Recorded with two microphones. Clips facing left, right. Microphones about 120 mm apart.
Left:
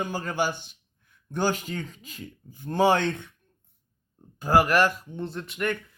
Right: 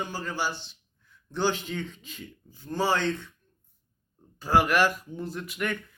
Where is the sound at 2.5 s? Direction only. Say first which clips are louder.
Left 5 dB; 55° left (ahead or behind).